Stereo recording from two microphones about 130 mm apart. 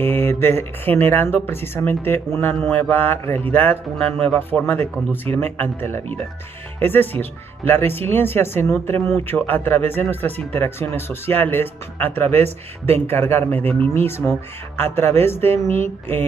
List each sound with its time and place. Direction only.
0.0 s speech: 15° left (ahead or behind)